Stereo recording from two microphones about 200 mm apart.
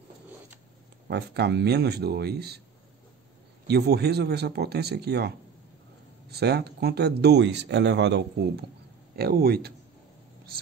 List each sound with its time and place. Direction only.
1.0 s speech: 55° right (ahead or behind)
3.6 s speech: 55° right (ahead or behind)
6.3 s speech: 55° right (ahead or behind)